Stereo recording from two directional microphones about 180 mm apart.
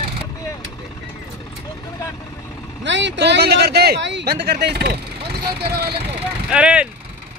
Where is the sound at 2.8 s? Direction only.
80° right; by 4.9 s 65° right (ahead or behind).